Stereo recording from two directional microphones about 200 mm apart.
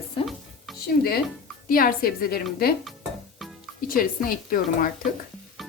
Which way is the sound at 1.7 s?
45° left (ahead or behind).